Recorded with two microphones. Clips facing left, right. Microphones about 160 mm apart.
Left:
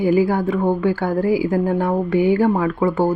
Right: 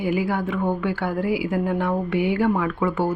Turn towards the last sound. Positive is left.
turn(degrees=35)  # may be behind; listen again after turning